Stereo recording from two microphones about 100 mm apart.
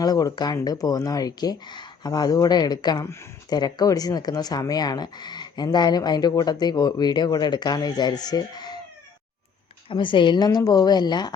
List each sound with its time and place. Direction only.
0.0 s speech: 40° left (ahead or behind)
3.0 s speech: 25° left (ahead or behind)
3.5 s speech: 40° left (ahead or behind)
9.9 s speech: 55° left (ahead or behind)